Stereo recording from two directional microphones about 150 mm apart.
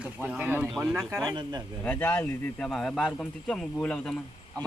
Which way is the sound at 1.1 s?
25° right (ahead or behind).